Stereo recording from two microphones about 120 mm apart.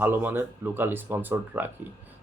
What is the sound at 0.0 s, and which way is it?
Speech, 15° right (ahead or behind).